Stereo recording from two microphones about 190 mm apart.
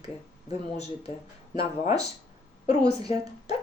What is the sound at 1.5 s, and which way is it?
Speech, 35° left (ahead or behind).